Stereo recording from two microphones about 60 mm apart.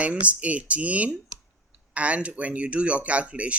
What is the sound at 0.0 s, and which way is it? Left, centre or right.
Speech, right.